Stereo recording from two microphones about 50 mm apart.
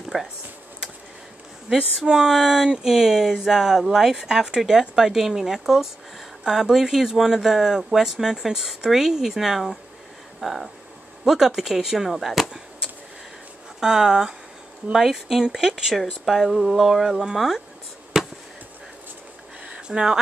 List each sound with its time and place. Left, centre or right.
0.1 s speech: centre
1.7 s speech: centre
13.7 s speech: centre
16.3 s speech: centre
19.6 s a sound: right